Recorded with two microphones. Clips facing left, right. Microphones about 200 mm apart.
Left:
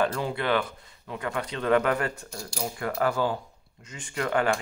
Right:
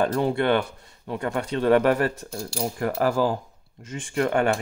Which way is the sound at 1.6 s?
30° right (ahead or behind).